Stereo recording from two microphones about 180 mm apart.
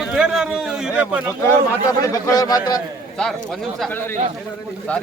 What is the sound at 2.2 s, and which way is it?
Speech, 20° left (ahead or behind).